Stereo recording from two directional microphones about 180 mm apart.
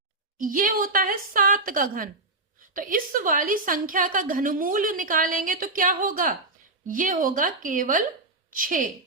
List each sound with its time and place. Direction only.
0.3 s a woman's voice: 50° right (ahead or behind)